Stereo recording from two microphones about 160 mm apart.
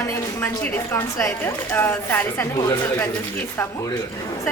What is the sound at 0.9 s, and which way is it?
A woman's voice, 15° left (ahead or behind).